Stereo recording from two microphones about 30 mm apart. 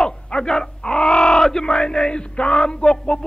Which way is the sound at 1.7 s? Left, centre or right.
Left.